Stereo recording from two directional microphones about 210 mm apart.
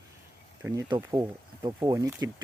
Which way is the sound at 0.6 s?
15° right (ahead or behind).